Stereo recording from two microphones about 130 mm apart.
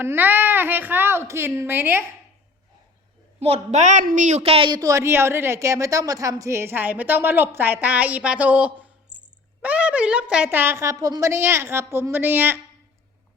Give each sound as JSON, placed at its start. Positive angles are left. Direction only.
{"t": 0.0, "sound": "a woman's voice", "side_deg": -15}
{"t": 3.4, "sound": "a woman's voice", "side_deg": -55}
{"t": 4.7, "sound": "a woman's voice", "side_deg": -25}